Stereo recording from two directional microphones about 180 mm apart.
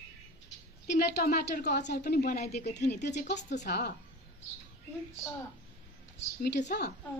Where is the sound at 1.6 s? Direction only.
70° left (ahead or behind).